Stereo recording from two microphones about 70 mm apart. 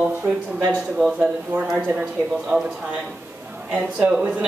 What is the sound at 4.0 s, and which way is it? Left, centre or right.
Speech, centre.